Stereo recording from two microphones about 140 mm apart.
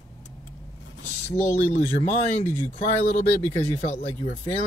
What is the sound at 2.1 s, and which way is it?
Speech, 50° left (ahead or behind).